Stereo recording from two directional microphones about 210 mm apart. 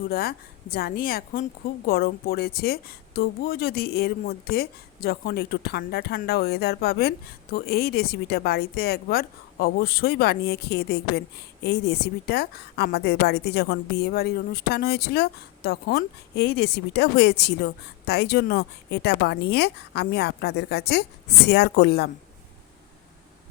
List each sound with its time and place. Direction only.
0.1 s a woman's voice: 45° left (ahead or behind)